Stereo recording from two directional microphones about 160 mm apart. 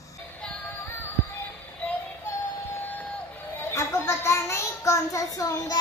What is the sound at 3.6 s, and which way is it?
Child singing, 15° left (ahead or behind).